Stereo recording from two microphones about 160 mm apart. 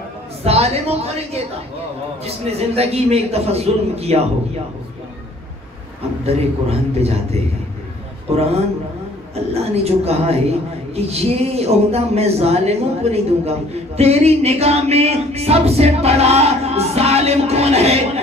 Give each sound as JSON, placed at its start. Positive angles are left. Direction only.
{"t": 0.4, "sound": "speech", "side_deg": -40}
{"t": 6.2, "sound": "speech", "side_deg": -40}